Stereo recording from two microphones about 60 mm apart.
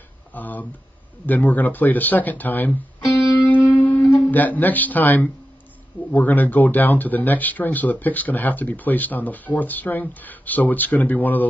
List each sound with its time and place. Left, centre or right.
0.3 s speech: left
3.7 s guitar: left
4.0 s music: left
4.3 s speech: left